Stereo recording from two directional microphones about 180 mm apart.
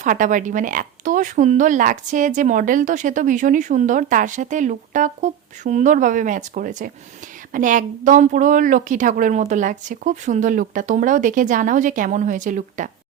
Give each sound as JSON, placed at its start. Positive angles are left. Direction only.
{"t": 0.0, "sound": "speech", "side_deg": -45}